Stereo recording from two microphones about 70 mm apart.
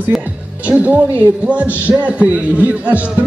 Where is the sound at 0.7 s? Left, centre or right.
Right.